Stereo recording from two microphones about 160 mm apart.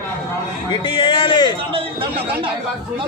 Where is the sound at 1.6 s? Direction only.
35° right (ahead or behind).